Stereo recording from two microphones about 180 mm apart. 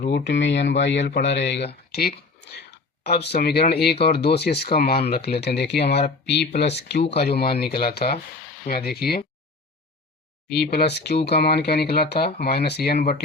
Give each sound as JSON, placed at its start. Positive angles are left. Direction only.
{"t": 0.0, "sound": "speech", "side_deg": 75}
{"t": 10.5, "sound": "speech", "side_deg": 65}